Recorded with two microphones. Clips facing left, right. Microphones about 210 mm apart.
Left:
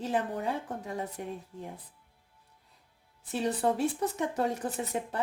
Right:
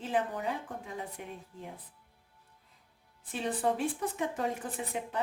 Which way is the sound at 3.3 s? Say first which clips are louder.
Left 3 dB; 40° left (ahead or behind).